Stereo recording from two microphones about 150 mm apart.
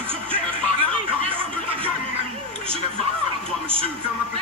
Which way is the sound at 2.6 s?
40° right (ahead or behind).